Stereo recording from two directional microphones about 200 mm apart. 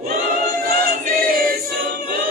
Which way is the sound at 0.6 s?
45° right (ahead or behind).